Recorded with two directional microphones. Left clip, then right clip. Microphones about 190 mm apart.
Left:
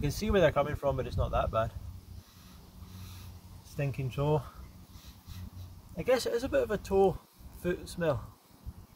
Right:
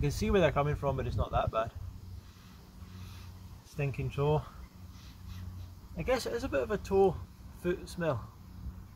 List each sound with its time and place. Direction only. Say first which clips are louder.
0.0 s speech: left 2 dB; 15° left (ahead or behind)
3.7 s speech: even; 15° left (ahead or behind)
5.9 s speech: left 3 dB; 15° left (ahead or behind)